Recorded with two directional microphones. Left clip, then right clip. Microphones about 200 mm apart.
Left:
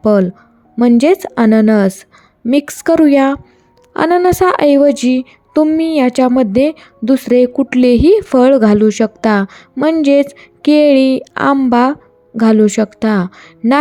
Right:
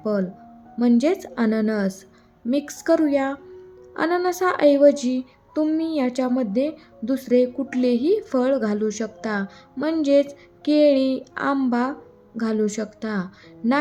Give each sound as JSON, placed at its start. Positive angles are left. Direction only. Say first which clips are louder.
{"t": 0.0, "sound": "speech", "louder": "left 13 dB", "side_deg": 45}